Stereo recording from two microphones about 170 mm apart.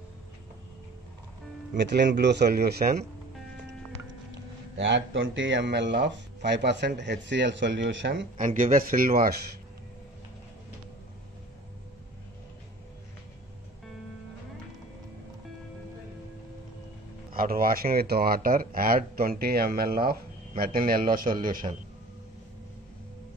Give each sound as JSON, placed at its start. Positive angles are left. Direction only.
{"t": 1.8, "sound": "speech", "side_deg": -90}
{"t": 4.7, "sound": "speech", "side_deg": -90}
{"t": 8.4, "sound": "speech", "side_deg": -50}
{"t": 17.3, "sound": "speech", "side_deg": -60}